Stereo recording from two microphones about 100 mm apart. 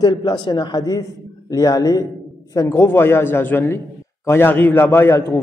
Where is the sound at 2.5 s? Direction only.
25° left (ahead or behind).